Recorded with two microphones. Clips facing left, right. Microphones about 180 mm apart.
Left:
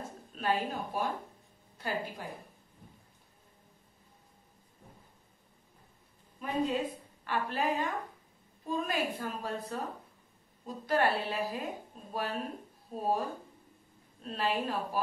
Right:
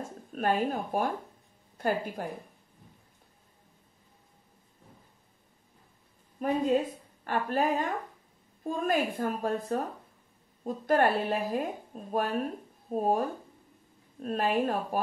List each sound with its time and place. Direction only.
0.3 s a woman's voice: 50° right (ahead or behind)
7.2 s a woman's voice: 45° right (ahead or behind)